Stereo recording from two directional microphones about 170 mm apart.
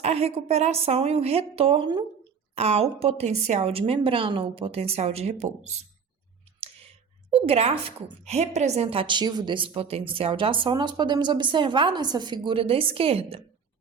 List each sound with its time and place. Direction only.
0.0 s a woman's voice: 35° right (ahead or behind)
7.3 s a woman's voice: 35° right (ahead or behind)